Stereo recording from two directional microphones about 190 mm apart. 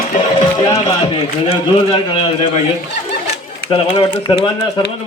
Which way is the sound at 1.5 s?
30° left (ahead or behind).